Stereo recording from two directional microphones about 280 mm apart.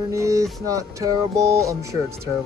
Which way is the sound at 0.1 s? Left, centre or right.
Centre.